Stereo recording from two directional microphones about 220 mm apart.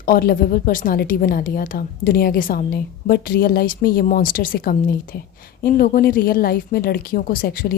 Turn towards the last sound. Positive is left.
turn(degrees=45)  # may be behind; listen again after turning